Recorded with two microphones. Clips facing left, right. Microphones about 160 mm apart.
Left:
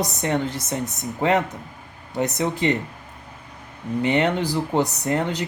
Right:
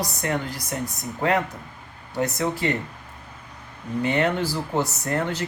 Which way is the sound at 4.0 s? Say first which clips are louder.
Left 2 dB; 20° left (ahead or behind).